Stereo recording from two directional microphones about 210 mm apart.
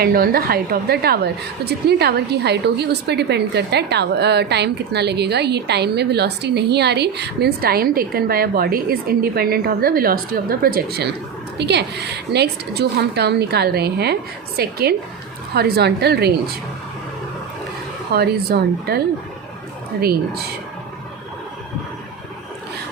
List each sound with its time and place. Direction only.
0.0 s a woman's voice: 45° right (ahead or behind)
18.1 s a woman's voice: 50° right (ahead or behind)